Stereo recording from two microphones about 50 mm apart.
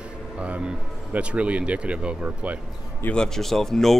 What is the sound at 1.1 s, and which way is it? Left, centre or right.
Speech, right.